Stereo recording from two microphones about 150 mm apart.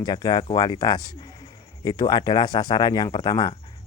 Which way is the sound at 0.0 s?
25° left (ahead or behind).